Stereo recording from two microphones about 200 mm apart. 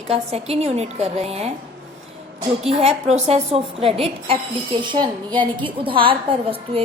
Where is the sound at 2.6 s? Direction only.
30° right (ahead or behind).